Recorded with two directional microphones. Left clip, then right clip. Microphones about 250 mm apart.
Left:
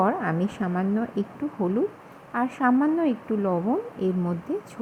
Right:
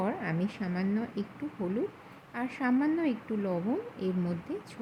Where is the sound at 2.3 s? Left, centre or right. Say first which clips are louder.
Left 8 dB; centre.